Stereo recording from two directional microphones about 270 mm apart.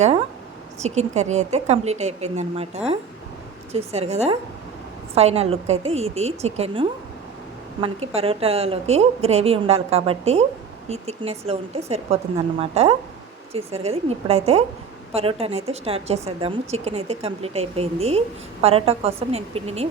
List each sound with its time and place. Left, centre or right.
0.8 s a woman's voice: right